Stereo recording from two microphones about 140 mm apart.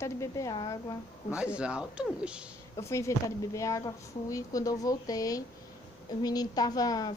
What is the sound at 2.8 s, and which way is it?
A woman's voice, 20° left (ahead or behind).